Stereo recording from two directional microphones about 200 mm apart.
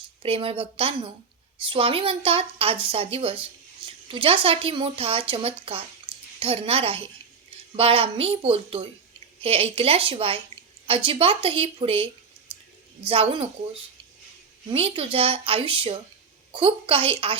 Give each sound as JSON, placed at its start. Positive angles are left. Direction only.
{"t": 0.2, "sound": "speech", "side_deg": -25}
{"t": 6.1, "sound": "a sound", "side_deg": -25}
{"t": 6.4, "sound": "speech", "side_deg": -30}
{"t": 13.1, "sound": "speech", "side_deg": -30}
{"t": 14.7, "sound": "speech", "side_deg": -30}